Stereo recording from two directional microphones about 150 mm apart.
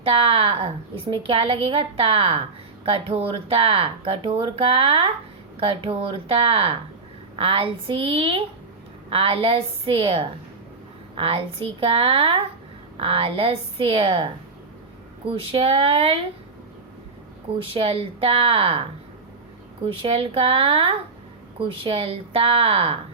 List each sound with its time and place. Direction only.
0.0 s speech: 40° right (ahead or behind)
15.3 s speech: 40° right (ahead or behind)
17.7 s speech: 40° right (ahead or behind)